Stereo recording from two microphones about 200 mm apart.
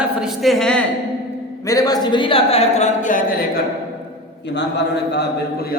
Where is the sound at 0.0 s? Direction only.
Centre (ahead or behind).